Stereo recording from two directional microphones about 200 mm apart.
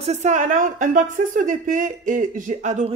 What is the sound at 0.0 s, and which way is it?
A woman's voice, 35° right (ahead or behind).